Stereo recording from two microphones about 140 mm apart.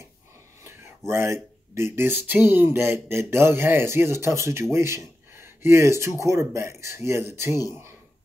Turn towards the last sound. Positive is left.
turn(degrees=-20)  # may be behind; listen again after turning